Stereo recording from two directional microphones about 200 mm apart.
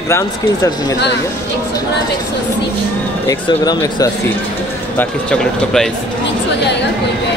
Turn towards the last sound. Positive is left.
turn(degrees=5)  # may be behind; listen again after turning